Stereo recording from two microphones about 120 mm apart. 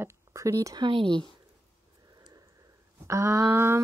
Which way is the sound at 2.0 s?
30° right (ahead or behind).